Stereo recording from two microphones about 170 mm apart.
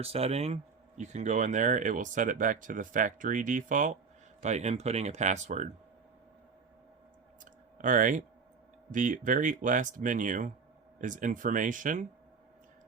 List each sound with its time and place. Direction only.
0.0 s speech: 35° right (ahead or behind)
7.8 s speech: 50° right (ahead or behind)